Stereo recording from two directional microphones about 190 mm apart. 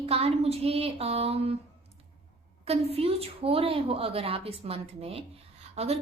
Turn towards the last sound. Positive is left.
turn(degrees=-30)  # may be behind; listen again after turning